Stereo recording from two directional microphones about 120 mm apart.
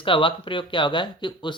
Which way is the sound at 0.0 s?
45° left (ahead or behind).